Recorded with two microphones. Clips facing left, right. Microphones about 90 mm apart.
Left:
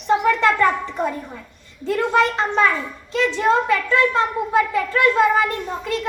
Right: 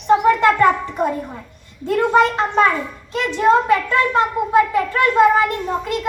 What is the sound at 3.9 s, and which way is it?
Child singing, 15° right (ahead or behind).